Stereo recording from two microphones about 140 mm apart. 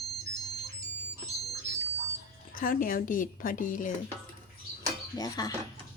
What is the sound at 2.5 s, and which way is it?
A woman's voice, 85° left.